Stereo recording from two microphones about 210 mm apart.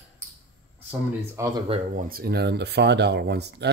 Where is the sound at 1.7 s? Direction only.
40° right (ahead or behind).